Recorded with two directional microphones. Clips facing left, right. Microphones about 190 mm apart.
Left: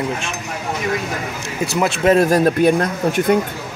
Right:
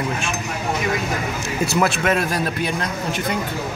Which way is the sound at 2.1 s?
40° left (ahead or behind).